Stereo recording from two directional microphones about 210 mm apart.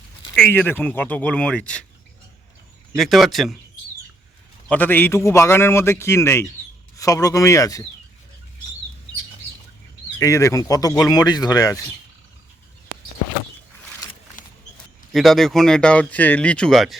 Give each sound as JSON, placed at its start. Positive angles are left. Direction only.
{"t": 0.3, "sound": "a man's voice", "side_deg": 10}
{"t": 2.9, "sound": "speech", "side_deg": 0}
{"t": 4.7, "sound": "a man's voice", "side_deg": 10}
{"t": 10.2, "sound": "a man's voice", "side_deg": 15}
{"t": 15.1, "sound": "speech", "side_deg": 0}